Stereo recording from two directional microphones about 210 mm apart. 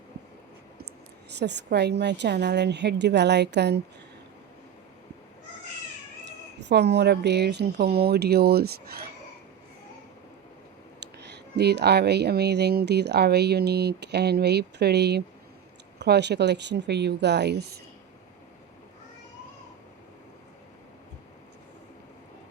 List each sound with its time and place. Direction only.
1.3 s speech: 55° right (ahead or behind)
6.2 s speech: 55° right (ahead or behind)
11.0 s speech: 55° right (ahead or behind)